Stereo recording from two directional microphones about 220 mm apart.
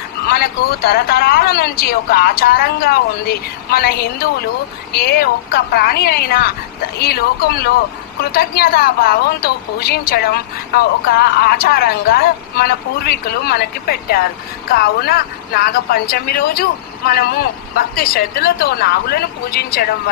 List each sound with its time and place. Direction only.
0.3 s a woman's voice: 45° left (ahead or behind)